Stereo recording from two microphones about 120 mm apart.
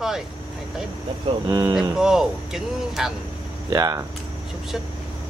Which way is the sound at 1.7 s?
5° right (ahead or behind).